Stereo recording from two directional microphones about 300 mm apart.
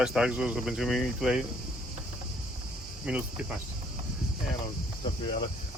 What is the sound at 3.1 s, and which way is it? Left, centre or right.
Speech, centre.